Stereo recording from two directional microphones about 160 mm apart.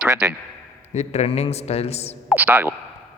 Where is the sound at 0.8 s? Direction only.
45° left (ahead or behind).